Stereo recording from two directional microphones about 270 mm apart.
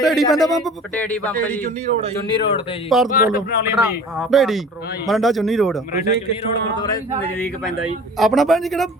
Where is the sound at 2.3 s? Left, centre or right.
Centre.